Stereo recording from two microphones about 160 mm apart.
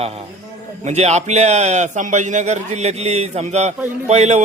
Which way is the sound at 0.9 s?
45° right (ahead or behind).